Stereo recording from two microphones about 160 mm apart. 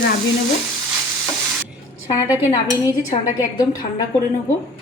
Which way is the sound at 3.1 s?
25° left (ahead or behind).